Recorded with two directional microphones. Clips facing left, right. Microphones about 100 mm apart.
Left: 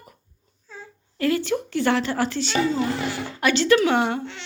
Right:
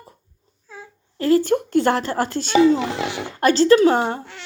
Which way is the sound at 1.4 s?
45° right (ahead or behind).